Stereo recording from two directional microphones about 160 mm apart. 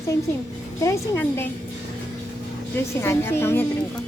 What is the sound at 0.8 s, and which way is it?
Speech, 20° left (ahead or behind).